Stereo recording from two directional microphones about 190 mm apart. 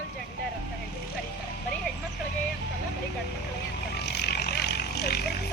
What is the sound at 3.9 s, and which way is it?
Vehicle, 60° left (ahead or behind).